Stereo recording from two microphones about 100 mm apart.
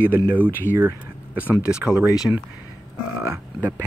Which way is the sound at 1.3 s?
15° right (ahead or behind).